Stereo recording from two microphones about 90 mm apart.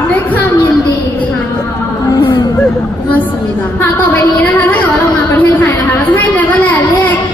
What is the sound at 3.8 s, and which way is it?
A woman's voice, 20° left (ahead or behind).